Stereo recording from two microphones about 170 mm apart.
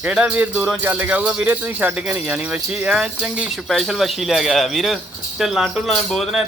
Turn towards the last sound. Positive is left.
turn(degrees=0)  # may be behind; listen again after turning